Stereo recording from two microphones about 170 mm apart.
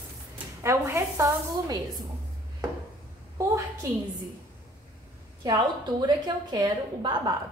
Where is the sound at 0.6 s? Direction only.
15° right (ahead or behind).